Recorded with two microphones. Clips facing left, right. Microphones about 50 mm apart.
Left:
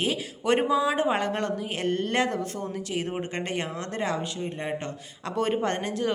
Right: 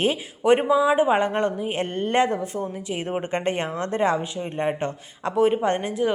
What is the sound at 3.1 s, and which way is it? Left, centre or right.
Speech, right.